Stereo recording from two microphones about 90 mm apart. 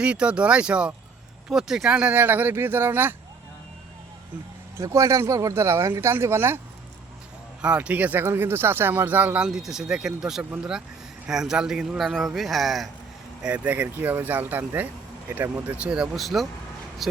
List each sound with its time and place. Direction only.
0.0 s speech: 10° right (ahead or behind)
4.8 s speech: 35° right (ahead or behind)
7.6 s speech: 15° right (ahead or behind)
9.5 s speech: 5° right (ahead or behind)
13.4 s speech: 15° right (ahead or behind)
15.9 s speech: 5° right (ahead or behind)